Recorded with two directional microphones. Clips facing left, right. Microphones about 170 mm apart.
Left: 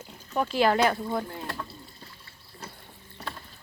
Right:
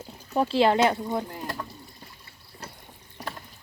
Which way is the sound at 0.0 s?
30° right (ahead or behind).